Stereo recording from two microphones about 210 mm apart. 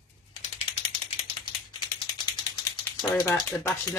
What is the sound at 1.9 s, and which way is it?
Ratchet, 20° left (ahead or behind).